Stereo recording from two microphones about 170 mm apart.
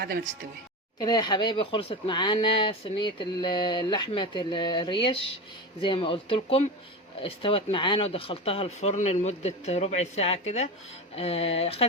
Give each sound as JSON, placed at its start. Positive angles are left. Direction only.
{"t": 0.9, "sound": "speech", "side_deg": 25}